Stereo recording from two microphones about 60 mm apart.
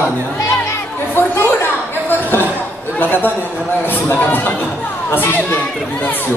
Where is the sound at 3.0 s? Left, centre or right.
Left.